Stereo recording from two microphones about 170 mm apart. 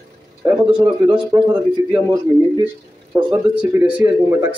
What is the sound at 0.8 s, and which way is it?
Speech, 25° right (ahead or behind).